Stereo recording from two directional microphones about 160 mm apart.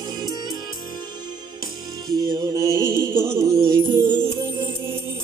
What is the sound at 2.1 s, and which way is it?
Music, 25° right (ahead or behind).